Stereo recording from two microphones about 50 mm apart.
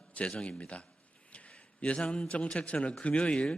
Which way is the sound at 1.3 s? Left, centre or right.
Left.